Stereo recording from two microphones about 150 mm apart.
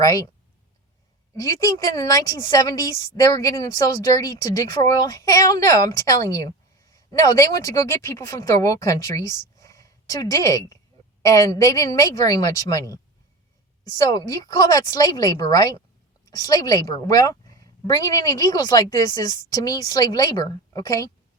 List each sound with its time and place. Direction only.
0.0 s a woman's voice: 25° left (ahead or behind)
1.4 s a woman's voice: 25° left (ahead or behind)
9.6 s a sound: 25° left (ahead or behind)
11.2 s a woman's voice: 20° left (ahead or behind)
14.0 s a woman's voice: 25° left (ahead or behind)